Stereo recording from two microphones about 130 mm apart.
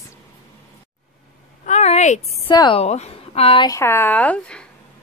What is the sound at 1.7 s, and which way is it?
Speech, 60° left (ahead or behind).